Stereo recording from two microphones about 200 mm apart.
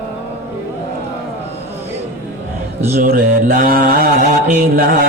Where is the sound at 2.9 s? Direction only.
45° right (ahead or behind).